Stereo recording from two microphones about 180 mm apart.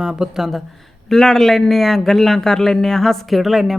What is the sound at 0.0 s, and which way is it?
A man's voice, 5° right (ahead or behind).